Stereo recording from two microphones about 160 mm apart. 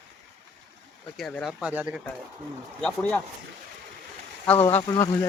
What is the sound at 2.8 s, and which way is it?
Speech, 10° left (ahead or behind).